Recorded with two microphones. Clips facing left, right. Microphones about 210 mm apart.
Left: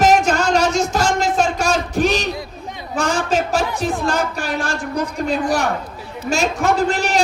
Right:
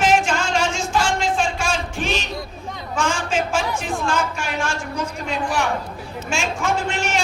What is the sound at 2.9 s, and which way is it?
A man's voice, 40° left (ahead or behind).